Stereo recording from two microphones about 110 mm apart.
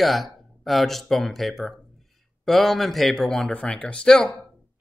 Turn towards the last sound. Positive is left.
turn(degrees=5)  # may be behind; listen again after turning